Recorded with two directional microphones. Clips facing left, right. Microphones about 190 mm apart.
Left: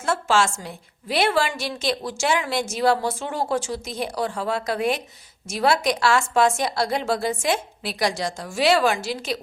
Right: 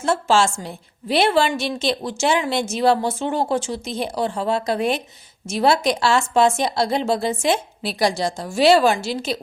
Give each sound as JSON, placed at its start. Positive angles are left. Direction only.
{"t": 0.0, "sound": "a woman's voice", "side_deg": -25}